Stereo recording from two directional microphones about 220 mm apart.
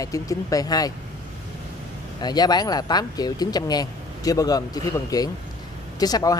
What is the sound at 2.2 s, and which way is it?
Speech, 20° left (ahead or behind).